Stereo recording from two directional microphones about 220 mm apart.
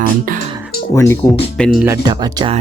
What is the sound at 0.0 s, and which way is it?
Speech, 40° right (ahead or behind).